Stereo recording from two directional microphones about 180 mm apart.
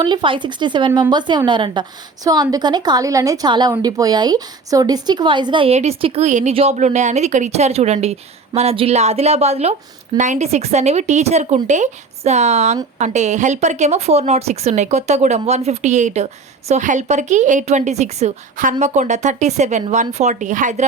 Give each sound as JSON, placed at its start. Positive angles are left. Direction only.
{"t": 0.0, "sound": "speech", "side_deg": -25}